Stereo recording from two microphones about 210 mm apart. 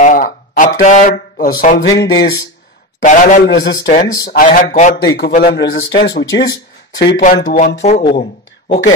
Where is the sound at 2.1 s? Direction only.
15° left (ahead or behind).